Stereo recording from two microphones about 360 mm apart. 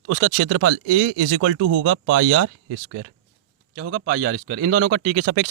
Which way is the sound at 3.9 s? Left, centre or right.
Right.